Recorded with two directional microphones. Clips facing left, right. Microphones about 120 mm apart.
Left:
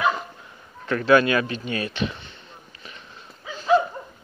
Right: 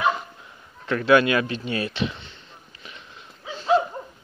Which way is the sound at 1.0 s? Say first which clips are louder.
Even; 20° right (ahead or behind).